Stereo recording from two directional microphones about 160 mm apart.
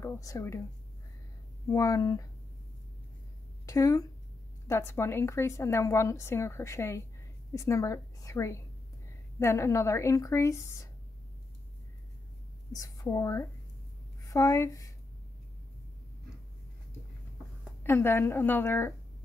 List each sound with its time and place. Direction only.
0.0 s a woman's voice: 20° left (ahead or behind)
1.7 s a woman's voice: 20° left (ahead or behind)
3.6 s a woman's voice: 20° left (ahead or behind)
12.7 s a woman's voice: 20° left (ahead or behind)
17.8 s a woman's voice: 15° left (ahead or behind)